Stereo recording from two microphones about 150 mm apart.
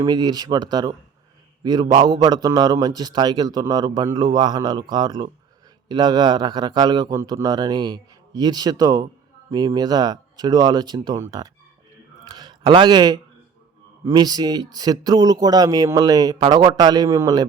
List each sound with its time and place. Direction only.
0.0 s speech: 25° right (ahead or behind)
12.2 s a sound: 30° right (ahead or behind)
14.0 s speech: 25° right (ahead or behind)